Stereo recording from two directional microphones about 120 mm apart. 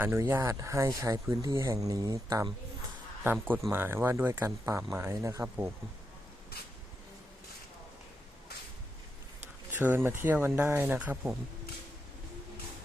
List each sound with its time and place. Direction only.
0.0 s speech: 20° right (ahead or behind)
3.7 s speech: 20° right (ahead or behind)
9.7 s speech: 15° right (ahead or behind)